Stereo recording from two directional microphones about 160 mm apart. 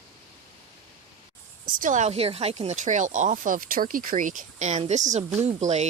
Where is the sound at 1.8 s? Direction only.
50° right (ahead or behind).